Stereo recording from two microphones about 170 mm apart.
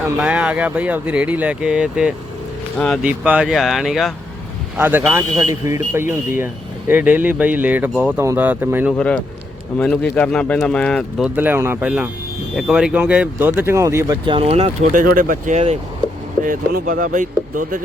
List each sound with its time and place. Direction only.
0.2 s speech: 5° right (ahead or behind)
3.0 s speech: 10° right (ahead or behind)
4.8 s speech: 10° right (ahead or behind)
9.0 s speech: 5° left (ahead or behind)
11.3 s speech: 10° right (ahead or behind)
14.3 s speech: 35° right (ahead or behind)
14.9 s speech: 55° right (ahead or behind)
16.4 s speech: 50° right (ahead or behind)